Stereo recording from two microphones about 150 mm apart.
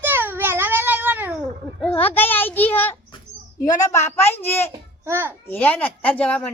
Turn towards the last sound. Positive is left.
turn(degrees=10)  # may be behind; listen again after turning